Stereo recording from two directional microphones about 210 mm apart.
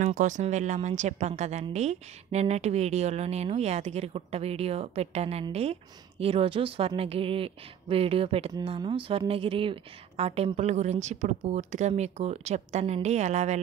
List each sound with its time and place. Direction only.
0.0 s a woman's voice: 35° right (ahead or behind)